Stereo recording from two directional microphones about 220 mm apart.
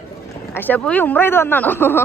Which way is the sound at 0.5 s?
10° left (ahead or behind).